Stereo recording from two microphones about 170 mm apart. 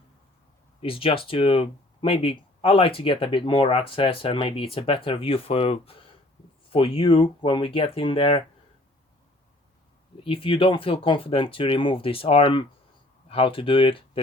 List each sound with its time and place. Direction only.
0.8 s speech: 35° left (ahead or behind)
10.2 s speech: 30° left (ahead or behind)